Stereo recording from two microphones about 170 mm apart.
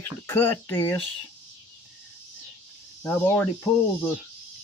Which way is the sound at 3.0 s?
10° left (ahead or behind).